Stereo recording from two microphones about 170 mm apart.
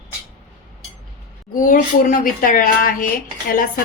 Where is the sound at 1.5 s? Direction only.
50° left (ahead or behind).